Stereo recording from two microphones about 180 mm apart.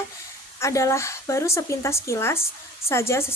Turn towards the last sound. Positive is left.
turn(degrees=15)  # may be behind; listen again after turning